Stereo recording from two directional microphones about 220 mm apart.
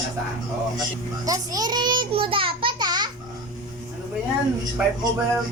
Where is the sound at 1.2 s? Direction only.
15° right (ahead or behind).